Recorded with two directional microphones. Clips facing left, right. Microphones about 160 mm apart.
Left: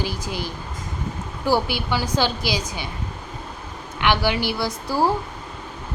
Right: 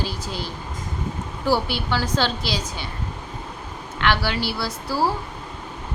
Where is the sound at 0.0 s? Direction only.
15° left (ahead or behind).